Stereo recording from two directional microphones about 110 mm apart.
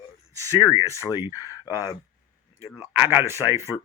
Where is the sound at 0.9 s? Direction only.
25° right (ahead or behind).